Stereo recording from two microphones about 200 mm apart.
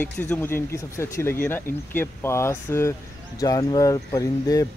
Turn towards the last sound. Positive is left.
turn(degrees=20)  # may be behind; listen again after turning